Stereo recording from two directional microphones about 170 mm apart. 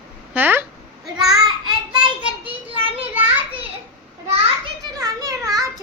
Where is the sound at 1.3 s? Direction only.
25° right (ahead or behind).